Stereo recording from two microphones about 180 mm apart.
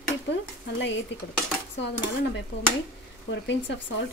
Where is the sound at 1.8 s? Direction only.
75° left (ahead or behind).